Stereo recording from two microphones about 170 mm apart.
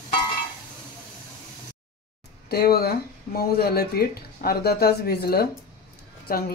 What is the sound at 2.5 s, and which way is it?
Speech, 65° left (ahead or behind).